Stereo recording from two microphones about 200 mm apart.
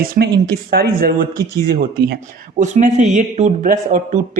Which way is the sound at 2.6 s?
35° right (ahead or behind).